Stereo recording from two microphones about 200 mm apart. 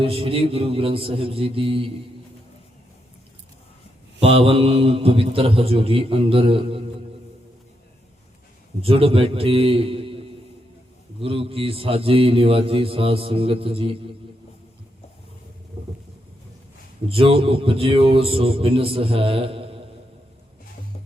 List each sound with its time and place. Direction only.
0.0 s a man's voice: 30° right (ahead or behind)
4.2 s a man's voice: 30° right (ahead or behind)
8.8 s a man's voice: 30° right (ahead or behind)
17.1 s a man's voice: 30° right (ahead or behind)